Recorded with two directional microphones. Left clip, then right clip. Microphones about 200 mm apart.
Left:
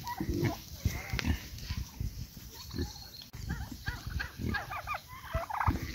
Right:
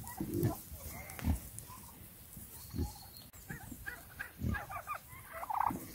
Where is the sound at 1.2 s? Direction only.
15° left (ahead or behind).